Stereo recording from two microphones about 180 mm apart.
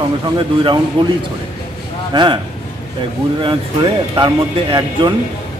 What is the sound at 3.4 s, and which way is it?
Speech, 25° right (ahead or behind).